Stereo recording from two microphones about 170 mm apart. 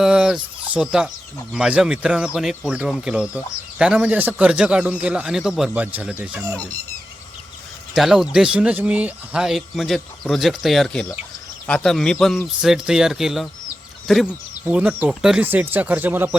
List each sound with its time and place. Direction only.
0.0 s fowl: 5° right (ahead or behind)
1.5 s speech: 5° right (ahead or behind)
6.4 s speech: 20° right (ahead or behind)
7.9 s speech: centre (ahead or behind)